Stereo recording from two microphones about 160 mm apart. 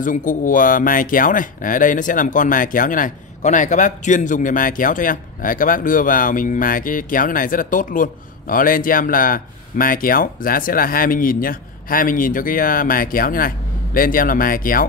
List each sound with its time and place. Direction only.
0.0 s speech: 55° left (ahead or behind)